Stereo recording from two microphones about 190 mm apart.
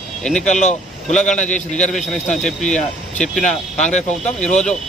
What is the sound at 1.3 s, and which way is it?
A man's voice, 5° left (ahead or behind).